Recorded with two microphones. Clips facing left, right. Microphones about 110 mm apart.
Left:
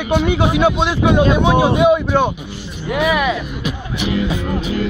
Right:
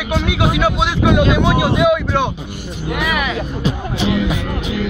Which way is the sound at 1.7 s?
30° left (ahead or behind).